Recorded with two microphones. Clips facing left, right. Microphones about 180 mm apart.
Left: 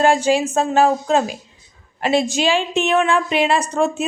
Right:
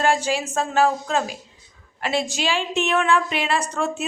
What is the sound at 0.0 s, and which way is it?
A woman's voice, 20° left (ahead or behind).